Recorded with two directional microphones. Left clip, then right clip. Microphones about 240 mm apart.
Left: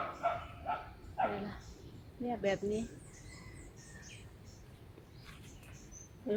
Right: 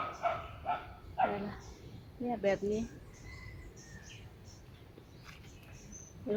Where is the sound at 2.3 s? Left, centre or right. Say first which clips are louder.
Right 2 dB; right.